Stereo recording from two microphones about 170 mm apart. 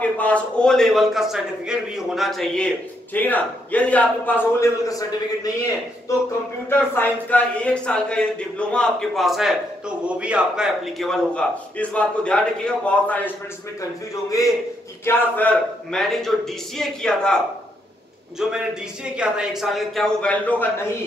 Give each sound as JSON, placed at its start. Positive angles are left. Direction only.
{"t": 0.0, "sound": "speech", "side_deg": 5}
{"t": 6.7, "sound": "speech", "side_deg": 10}
{"t": 14.3, "sound": "a man's voice", "side_deg": 20}
{"t": 15.0, "sound": "speech", "side_deg": 10}
{"t": 18.4, "sound": "speech", "side_deg": -5}